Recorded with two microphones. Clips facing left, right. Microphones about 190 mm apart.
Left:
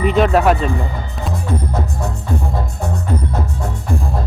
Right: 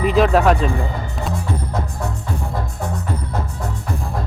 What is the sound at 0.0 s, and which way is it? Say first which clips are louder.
Speech: left 1 dB; centre (ahead or behind).